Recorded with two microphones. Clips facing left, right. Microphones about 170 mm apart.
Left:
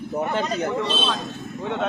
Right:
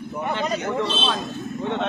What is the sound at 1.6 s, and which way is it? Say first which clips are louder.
Speech: even; 5° left (ahead or behind).